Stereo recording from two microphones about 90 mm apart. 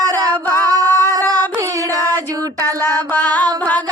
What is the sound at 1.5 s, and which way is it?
Music, 35° right (ahead or behind).